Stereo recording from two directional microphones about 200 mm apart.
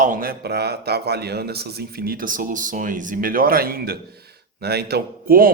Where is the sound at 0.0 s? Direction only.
45° right (ahead or behind).